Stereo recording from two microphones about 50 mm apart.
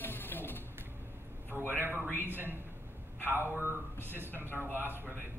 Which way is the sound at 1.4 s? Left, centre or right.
Right.